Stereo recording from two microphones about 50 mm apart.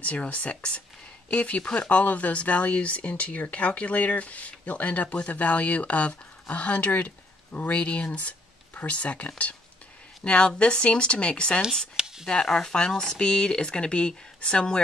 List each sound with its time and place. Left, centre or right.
0.0 s speech: left